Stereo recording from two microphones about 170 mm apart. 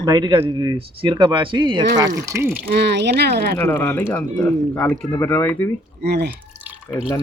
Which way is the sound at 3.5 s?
10° left (ahead or behind).